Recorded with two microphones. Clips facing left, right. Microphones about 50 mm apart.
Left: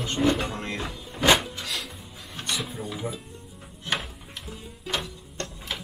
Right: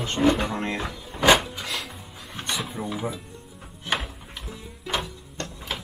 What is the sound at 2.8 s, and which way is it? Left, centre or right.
Speech, centre.